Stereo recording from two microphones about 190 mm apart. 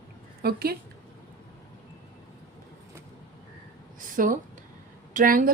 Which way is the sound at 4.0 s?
45° right (ahead or behind).